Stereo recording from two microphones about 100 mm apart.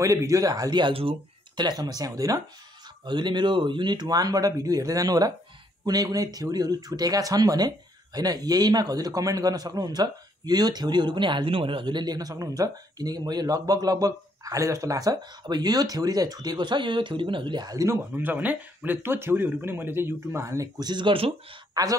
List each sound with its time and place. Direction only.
0.0 s speech: 30° right (ahead or behind)
3.1 s speech: 50° right (ahead or behind)
18.1 s speech: 15° right (ahead or behind); by 21.4 s 65° right (ahead or behind)
21.8 s speech: 35° right (ahead or behind)